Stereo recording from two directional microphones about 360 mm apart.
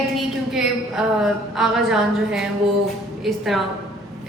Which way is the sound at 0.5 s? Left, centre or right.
Centre.